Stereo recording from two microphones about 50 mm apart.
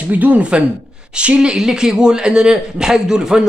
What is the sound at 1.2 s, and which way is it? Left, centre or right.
Speech, right.